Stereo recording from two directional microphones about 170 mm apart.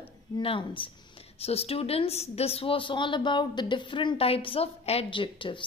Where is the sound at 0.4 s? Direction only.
30° left (ahead or behind).